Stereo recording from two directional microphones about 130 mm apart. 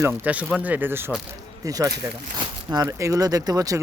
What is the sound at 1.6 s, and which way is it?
Speech, 25° right (ahead or behind).